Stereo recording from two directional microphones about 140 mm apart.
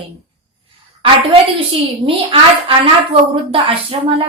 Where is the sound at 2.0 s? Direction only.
40° right (ahead or behind).